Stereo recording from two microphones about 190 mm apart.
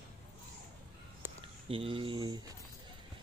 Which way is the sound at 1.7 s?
30° right (ahead or behind).